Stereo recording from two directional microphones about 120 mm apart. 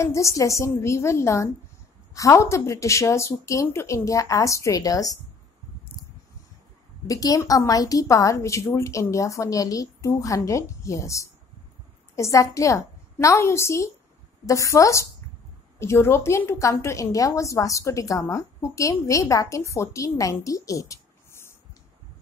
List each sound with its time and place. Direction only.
0.0 s a woman's voice: 25° left (ahead or behind)
7.1 s a woman's voice: 30° left (ahead or behind)